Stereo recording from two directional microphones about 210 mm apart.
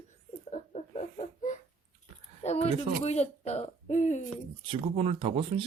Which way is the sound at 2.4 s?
30° left (ahead or behind).